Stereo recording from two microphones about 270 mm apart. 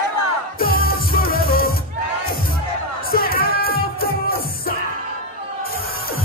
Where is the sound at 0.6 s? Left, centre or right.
Left.